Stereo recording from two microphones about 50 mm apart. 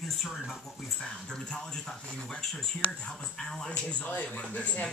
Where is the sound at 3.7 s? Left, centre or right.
Left.